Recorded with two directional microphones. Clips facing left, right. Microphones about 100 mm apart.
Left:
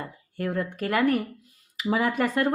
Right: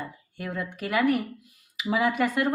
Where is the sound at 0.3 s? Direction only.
40° left (ahead or behind).